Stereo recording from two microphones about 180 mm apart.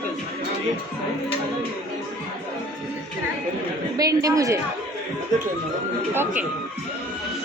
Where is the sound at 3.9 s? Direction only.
20° right (ahead or behind).